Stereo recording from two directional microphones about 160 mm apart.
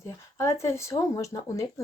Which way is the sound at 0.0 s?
20° left (ahead or behind).